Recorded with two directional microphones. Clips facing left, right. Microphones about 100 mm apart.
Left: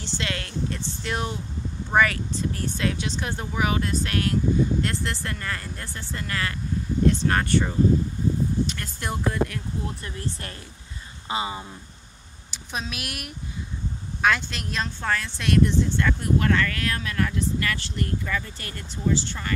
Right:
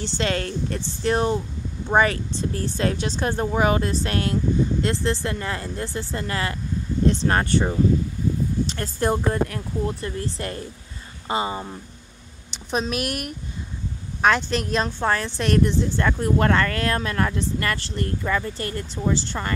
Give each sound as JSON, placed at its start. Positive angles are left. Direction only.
{"t": 0.0, "sound": "speech", "side_deg": -35}
{"t": 12.7, "sound": "a woman's voice", "side_deg": -45}